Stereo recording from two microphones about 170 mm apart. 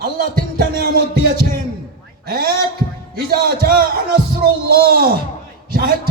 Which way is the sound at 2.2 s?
60° right (ahead or behind).